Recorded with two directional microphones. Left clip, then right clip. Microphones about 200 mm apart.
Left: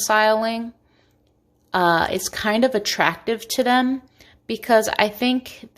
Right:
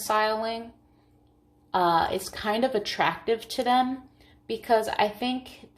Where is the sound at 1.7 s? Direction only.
45° left (ahead or behind).